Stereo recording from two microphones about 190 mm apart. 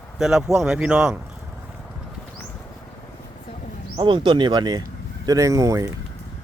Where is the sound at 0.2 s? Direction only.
Centre (ahead or behind).